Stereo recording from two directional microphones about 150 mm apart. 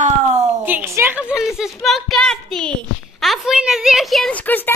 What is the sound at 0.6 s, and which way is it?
A woman's voice, 15° right (ahead or behind).